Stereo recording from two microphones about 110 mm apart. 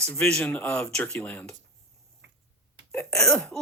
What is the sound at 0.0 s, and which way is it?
A woman's voice, 10° left (ahead or behind).